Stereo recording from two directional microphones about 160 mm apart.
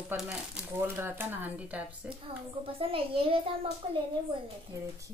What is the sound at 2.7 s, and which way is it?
A child's voice, 35° right (ahead or behind).